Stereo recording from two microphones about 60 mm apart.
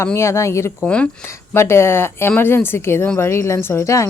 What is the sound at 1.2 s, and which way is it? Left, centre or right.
A woman's voice, left.